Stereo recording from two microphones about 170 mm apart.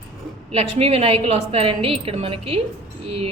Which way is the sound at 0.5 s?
35° right (ahead or behind).